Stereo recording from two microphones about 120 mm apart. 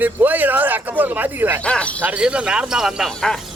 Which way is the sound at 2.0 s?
10° right (ahead or behind).